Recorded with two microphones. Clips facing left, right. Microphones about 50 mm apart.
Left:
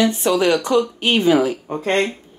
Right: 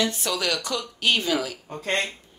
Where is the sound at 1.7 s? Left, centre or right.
Centre.